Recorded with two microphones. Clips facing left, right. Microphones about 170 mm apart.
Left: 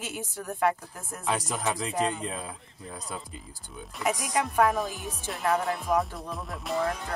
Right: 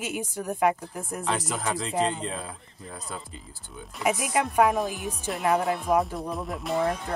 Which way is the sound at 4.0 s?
10° right (ahead or behind).